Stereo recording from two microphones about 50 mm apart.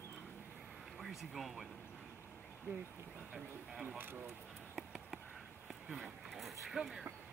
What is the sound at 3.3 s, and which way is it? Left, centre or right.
Speech, centre.